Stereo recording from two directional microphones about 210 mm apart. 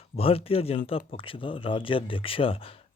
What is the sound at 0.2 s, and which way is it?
A man's voice, 25° left (ahead or behind).